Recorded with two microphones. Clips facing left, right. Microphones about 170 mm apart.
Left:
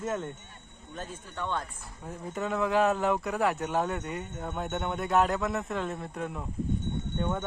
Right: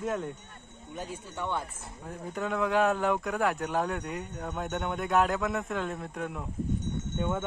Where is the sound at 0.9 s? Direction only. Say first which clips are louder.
Right 2 dB; 15° right (ahead or behind).